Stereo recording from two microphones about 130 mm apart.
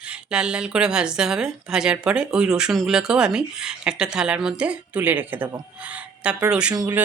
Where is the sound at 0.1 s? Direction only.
5° right (ahead or behind).